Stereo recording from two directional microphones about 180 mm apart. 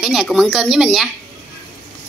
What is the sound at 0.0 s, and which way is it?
Speech, 5° right (ahead or behind).